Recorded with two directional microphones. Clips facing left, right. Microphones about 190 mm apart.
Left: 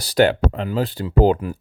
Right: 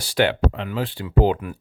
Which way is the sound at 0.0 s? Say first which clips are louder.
Left 4 dB; 40° left (ahead or behind).